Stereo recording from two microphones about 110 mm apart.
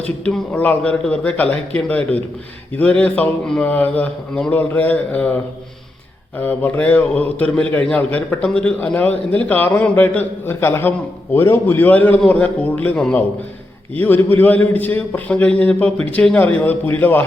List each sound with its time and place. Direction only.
0.3 s a man's voice: 15° left (ahead or behind)
6.4 s a man's voice: 15° left (ahead or behind)